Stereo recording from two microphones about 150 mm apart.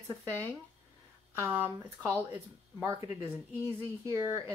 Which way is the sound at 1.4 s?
15° right (ahead or behind).